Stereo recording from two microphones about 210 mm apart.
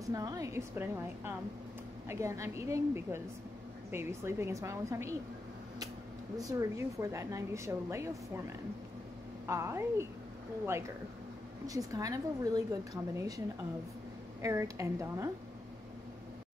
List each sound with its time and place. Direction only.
0.0 s a woman's voice: 15° right (ahead or behind)
6.3 s a woman's voice: 15° right (ahead or behind)
9.5 s a woman's voice: 10° right (ahead or behind)
11.6 s a woman's voice: 15° right (ahead or behind)
14.4 s a woman's voice: 15° right (ahead or behind)